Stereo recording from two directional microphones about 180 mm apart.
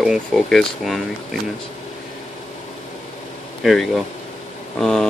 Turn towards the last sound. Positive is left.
turn(degrees=5)  # may be behind; listen again after turning